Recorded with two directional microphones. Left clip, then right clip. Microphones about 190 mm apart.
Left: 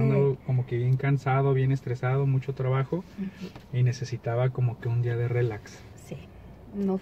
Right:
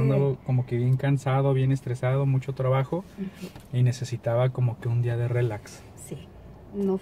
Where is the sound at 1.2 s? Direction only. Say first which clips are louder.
Even; 20° right (ahead or behind).